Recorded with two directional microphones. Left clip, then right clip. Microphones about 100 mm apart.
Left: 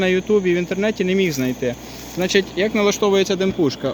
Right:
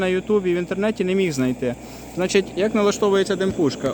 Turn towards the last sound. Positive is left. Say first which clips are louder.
# left 1 dB
turn(degrees=15)  # may be behind; listen again after turning